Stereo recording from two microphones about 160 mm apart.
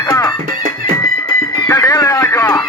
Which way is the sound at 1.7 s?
20° left (ahead or behind).